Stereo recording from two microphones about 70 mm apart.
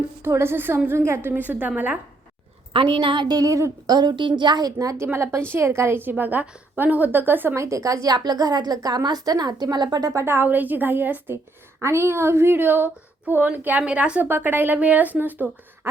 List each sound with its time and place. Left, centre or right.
0.2 s a woman's voice: right
1.3 s speech: right
3.2 s a woman's voice: right
3.5 s speech: right
3.9 s a woman's voice: right
5.1 s a woman's voice: right
7.5 s a woman's voice: right
10.2 s speech: right
11.8 s speech: right; by 14.3 s centre
14.3 s speech: right